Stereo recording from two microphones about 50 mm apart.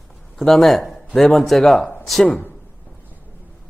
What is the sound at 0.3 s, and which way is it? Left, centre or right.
Speech, centre.